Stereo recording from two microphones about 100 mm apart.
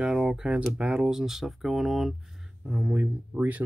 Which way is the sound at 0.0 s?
5° right (ahead or behind).